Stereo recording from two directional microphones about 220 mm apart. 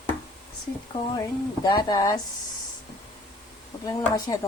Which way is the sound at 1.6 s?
20° left (ahead or behind).